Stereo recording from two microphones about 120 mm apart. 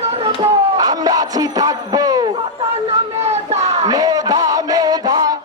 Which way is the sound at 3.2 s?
65° right (ahead or behind).